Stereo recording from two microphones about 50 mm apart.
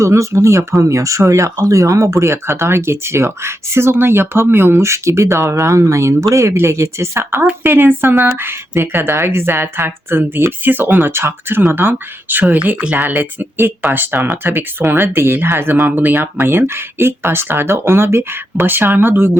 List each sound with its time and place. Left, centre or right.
0.0 s speech: right
11.1 s speech: right